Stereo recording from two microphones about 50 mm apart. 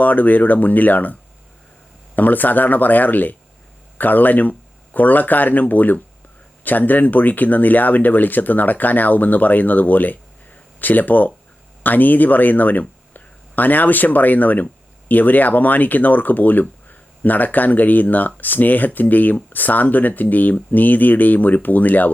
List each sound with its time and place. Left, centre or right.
0.0 s speech: left
2.1 s speech: left